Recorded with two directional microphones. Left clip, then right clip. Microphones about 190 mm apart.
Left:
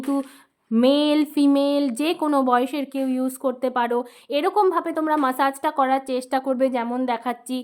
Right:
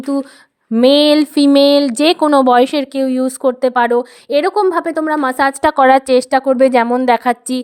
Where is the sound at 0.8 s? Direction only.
45° right (ahead or behind).